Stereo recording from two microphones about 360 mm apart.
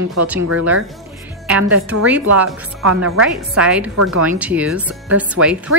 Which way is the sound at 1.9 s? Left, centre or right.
Right.